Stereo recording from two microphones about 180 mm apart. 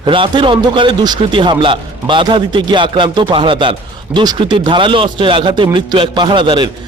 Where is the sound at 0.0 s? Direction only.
25° right (ahead or behind).